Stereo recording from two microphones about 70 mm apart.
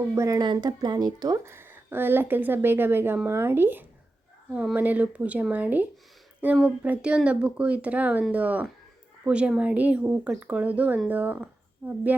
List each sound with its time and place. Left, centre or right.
0.3 s speech: right
1.5 s speech: right